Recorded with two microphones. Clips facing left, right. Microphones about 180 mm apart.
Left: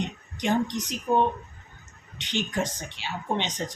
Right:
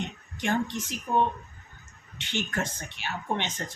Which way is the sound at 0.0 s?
15° left (ahead or behind).